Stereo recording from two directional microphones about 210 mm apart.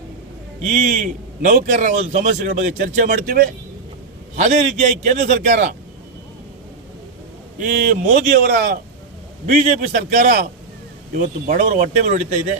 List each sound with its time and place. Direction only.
0.7 s a man's voice: 40° right (ahead or behind)
7.6 s a man's voice: 40° right (ahead or behind)